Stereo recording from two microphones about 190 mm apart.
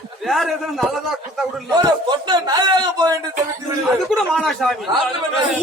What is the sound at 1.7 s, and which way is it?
A man's voice, 20° right (ahead or behind).